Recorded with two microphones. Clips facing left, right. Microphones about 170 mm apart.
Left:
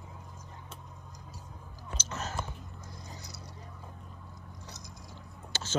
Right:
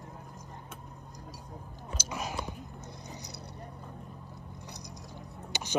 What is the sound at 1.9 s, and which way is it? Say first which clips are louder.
Whispering: right 1 dB; 10° right (ahead or behind).